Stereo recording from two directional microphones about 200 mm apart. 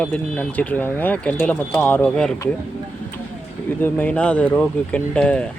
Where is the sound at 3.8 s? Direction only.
5° left (ahead or behind).